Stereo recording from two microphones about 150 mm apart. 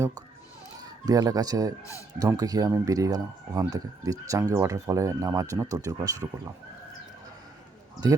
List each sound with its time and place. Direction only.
0.8 s speech: 25° right (ahead or behind)
1.8 s speech: 20° left (ahead or behind)
2.1 s speech: 25° right (ahead or behind)